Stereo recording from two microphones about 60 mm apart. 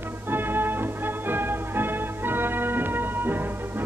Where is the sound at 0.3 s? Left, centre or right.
Right.